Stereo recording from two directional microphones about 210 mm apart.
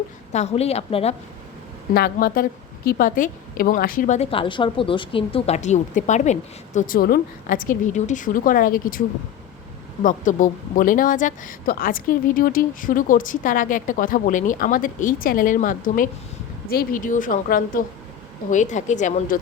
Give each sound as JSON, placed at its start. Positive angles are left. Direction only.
{"t": 0.3, "sound": "a woman's voice", "side_deg": 30}
{"t": 1.9, "sound": "a woman's voice", "side_deg": 45}